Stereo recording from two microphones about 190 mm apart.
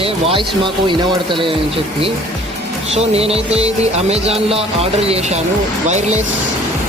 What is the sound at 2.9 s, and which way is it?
Speech, 30° right (ahead or behind).